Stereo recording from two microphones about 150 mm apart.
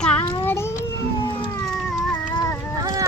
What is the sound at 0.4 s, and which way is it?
Cat, 15° left (ahead or behind).